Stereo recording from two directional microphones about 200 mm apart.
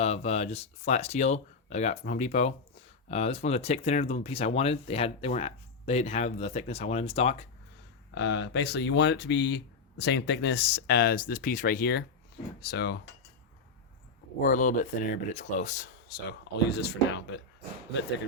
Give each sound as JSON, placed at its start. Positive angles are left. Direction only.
{"t": 0.0, "sound": "speech", "side_deg": 30}
{"t": 8.1, "sound": "speech", "side_deg": 65}
{"t": 14.4, "sound": "speech", "side_deg": 40}
{"t": 16.6, "sound": "speech", "side_deg": 55}